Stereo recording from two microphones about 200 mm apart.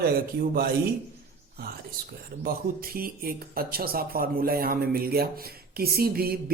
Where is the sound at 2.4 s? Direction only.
50° right (ahead or behind).